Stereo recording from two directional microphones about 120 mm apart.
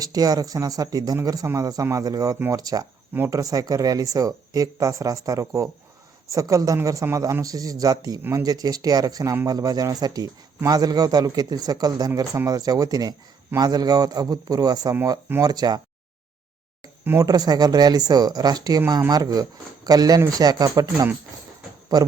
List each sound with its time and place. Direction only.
0.0 s speech: 30° right (ahead or behind)
3.1 s speech: 15° right (ahead or behind)
3.3 s speech: 30° right (ahead or behind)
17.2 s speech: 30° right (ahead or behind)